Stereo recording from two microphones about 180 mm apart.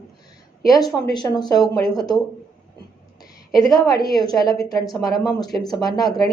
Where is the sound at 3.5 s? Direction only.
Centre (ahead or behind).